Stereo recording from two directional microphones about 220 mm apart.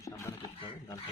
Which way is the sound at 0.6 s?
25° left (ahead or behind).